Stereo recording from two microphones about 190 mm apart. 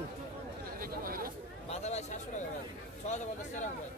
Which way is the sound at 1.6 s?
35° left (ahead or behind).